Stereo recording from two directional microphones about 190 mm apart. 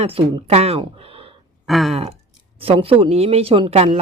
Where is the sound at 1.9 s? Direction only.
30° right (ahead or behind).